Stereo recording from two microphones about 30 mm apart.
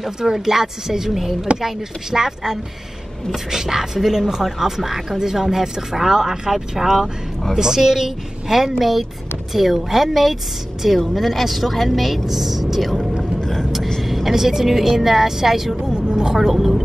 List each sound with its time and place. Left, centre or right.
0.2 s a woman's voice: centre
13.4 s vehicle: centre
14.0 s vehicle: centre
14.3 s speech: centre
15.7 s a sound: right
16.3 s speech: centre